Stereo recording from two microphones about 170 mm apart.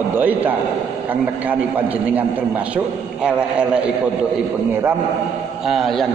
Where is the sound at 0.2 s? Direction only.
10° right (ahead or behind).